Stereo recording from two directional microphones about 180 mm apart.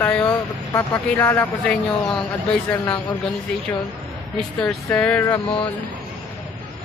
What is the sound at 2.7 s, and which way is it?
Speech, 5° left (ahead or behind).